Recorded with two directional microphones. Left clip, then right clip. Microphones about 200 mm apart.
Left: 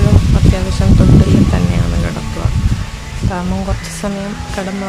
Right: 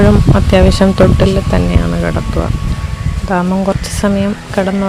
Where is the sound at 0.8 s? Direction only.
40° right (ahead or behind).